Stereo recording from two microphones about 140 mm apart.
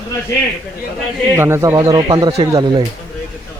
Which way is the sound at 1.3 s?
20° right (ahead or behind).